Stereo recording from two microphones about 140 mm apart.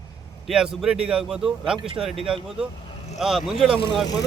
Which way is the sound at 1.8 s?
40° right (ahead or behind).